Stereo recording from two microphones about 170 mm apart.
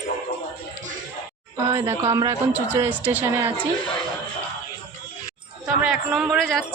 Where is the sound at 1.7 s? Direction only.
15° right (ahead or behind).